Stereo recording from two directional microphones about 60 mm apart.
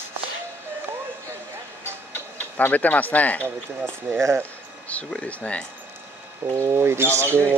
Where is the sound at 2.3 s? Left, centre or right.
Left.